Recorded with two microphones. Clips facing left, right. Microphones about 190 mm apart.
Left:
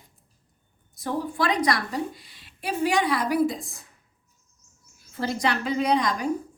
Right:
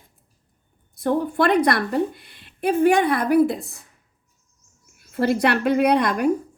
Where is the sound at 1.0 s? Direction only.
60° right (ahead or behind).